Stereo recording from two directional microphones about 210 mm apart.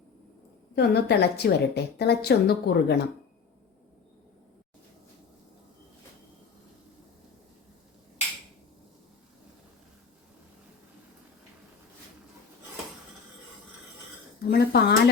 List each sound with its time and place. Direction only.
0.8 s a woman's voice: 50° left (ahead or behind)
14.5 s speech: 50° left (ahead or behind)